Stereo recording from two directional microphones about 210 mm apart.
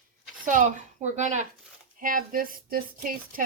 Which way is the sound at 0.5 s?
35° right (ahead or behind).